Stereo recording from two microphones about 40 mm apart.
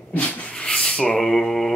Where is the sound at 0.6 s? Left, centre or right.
Left.